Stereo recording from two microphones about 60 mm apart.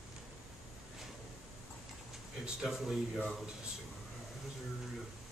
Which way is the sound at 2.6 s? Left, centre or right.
Centre.